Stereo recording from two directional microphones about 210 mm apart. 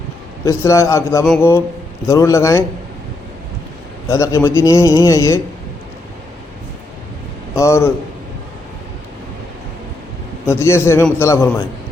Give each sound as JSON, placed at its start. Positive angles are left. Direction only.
{"t": 0.4, "sound": "speech", "side_deg": 15}
{"t": 4.1, "sound": "speech", "side_deg": 15}
{"t": 7.5, "sound": "speech", "side_deg": 15}
{"t": 10.4, "sound": "speech", "side_deg": 10}